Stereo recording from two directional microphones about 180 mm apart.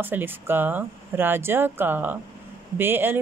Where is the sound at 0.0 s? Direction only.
10° right (ahead or behind).